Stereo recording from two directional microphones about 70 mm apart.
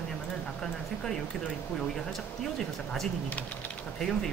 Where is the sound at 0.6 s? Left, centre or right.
Centre.